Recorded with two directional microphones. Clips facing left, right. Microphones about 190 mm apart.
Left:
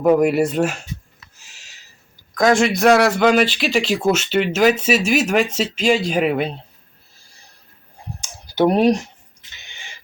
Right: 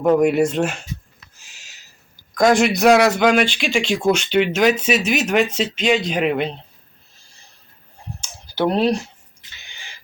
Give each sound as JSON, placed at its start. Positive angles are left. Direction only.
{"t": 0.0, "sound": "speech", "side_deg": 5}
{"t": 1.4, "sound": "a sound", "side_deg": 0}
{"t": 2.3, "sound": "speech", "side_deg": 0}
{"t": 8.2, "sound": "clicking", "side_deg": 15}